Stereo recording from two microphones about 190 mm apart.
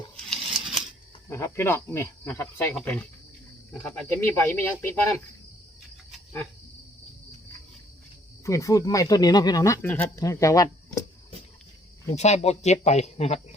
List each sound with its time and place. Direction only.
0.3 s a sound: centre (ahead or behind)
1.3 s speech: 15° left (ahead or behind)
8.4 s speech: 15° left (ahead or behind)
12.0 s speech: 35° left (ahead or behind)